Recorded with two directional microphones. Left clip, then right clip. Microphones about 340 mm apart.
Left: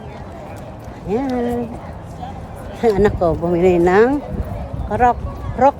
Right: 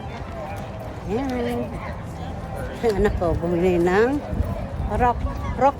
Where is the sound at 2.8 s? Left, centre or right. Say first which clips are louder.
Left 6 dB; left.